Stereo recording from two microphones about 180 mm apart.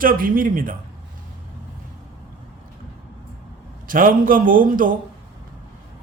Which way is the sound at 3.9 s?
50° right (ahead or behind).